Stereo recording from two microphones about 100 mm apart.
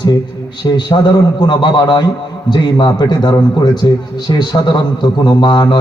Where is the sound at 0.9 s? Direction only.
50° left (ahead or behind).